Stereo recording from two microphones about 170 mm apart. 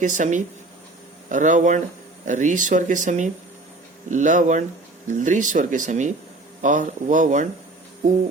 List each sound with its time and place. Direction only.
0.0 s speech: 45° right (ahead or behind)